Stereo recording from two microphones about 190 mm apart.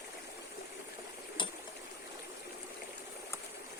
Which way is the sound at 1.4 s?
25° left (ahead or behind).